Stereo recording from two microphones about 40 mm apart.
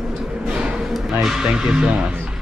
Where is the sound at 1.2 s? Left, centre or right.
Centre.